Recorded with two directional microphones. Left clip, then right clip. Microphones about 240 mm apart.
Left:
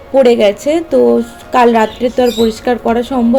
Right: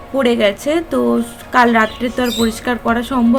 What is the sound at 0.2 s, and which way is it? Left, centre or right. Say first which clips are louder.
Speech: left 6 dB; centre.